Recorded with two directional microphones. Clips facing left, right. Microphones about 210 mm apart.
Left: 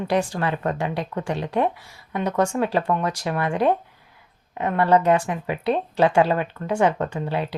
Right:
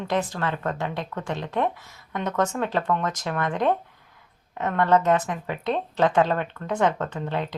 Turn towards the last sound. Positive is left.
turn(degrees=10)  # may be behind; listen again after turning